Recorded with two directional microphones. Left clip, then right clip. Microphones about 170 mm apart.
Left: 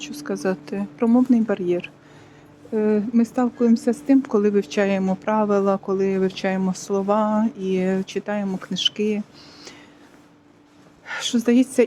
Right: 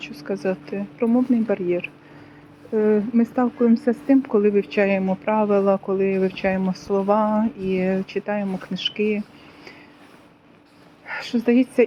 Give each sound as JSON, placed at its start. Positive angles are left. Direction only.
{"t": 0.0, "sound": "a woman's voice", "side_deg": 30}
{"t": 11.0, "sound": "a woman's voice", "side_deg": 30}